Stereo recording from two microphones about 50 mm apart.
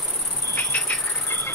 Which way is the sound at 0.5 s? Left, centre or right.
Left.